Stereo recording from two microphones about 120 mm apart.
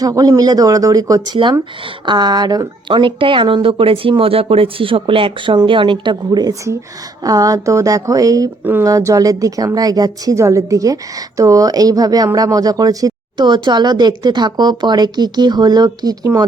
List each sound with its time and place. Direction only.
0.0 s a woman's voice: 30° right (ahead or behind)
8.6 s speech: 15° right (ahead or behind)
8.9 s a woman's voice: 30° right (ahead or behind)